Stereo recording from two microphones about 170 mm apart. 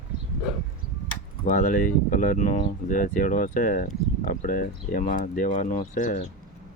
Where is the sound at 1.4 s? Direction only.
55° left (ahead or behind).